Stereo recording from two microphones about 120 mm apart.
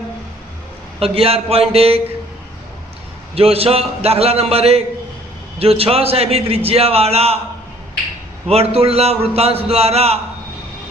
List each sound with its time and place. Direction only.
0.9 s a man's voice: 55° right (ahead or behind)
3.3 s a man's voice: 55° right (ahead or behind)
8.4 s a man's voice: 60° right (ahead or behind)